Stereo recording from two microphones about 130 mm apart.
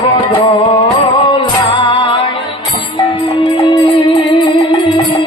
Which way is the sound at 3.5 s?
40° left (ahead or behind).